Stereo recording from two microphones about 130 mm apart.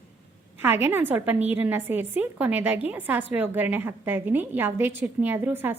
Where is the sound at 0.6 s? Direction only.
15° right (ahead or behind).